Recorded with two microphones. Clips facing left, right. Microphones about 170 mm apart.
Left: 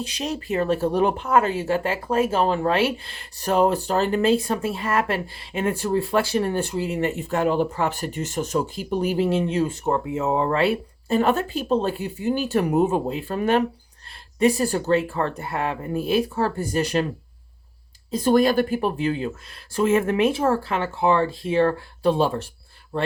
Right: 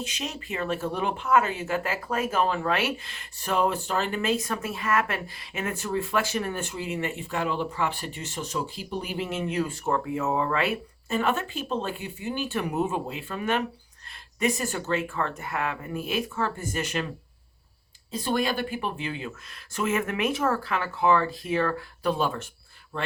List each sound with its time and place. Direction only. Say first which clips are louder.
0.0 s speech: left 6 dB; 35° left (ahead or behind)
18.1 s speech: left 9 dB; 45° left (ahead or behind)